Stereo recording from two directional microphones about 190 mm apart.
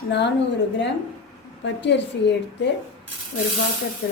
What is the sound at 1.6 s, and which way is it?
A woman's voice, 65° left (ahead or behind).